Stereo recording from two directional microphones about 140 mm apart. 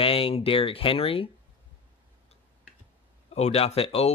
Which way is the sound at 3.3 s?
50° left (ahead or behind).